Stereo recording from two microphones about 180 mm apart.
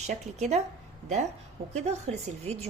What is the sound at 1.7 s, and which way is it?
Speech, 35° right (ahead or behind).